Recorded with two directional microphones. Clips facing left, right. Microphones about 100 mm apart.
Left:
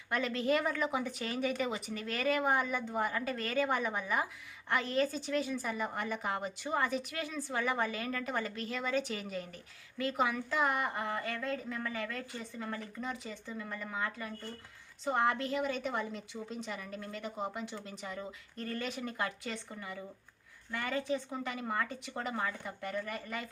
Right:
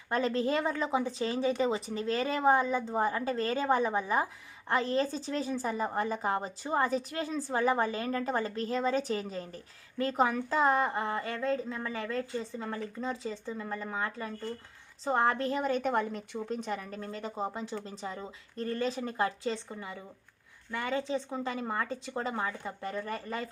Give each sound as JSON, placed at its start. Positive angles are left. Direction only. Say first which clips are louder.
{"t": 0.1, "sound": "a woman's voice", "louder": "right 3 dB", "side_deg": -35}